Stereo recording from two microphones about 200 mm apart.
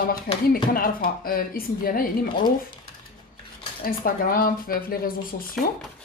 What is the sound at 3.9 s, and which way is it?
Speech, 45° left (ahead or behind).